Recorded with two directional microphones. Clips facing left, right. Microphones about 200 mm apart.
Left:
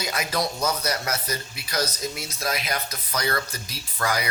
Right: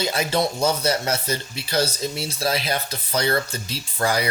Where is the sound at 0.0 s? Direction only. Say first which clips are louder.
Right 5 dB; 30° right (ahead or behind).